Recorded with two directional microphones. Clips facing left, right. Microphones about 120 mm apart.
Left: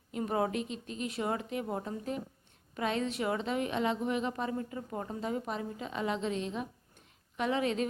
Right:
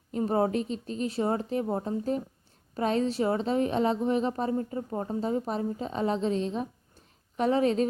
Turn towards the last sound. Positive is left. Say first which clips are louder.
# right 6 dB
turn(degrees=-35)  # may be behind; listen again after turning